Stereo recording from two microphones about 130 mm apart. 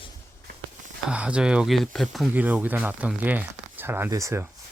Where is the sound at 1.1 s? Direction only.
10° right (ahead or behind).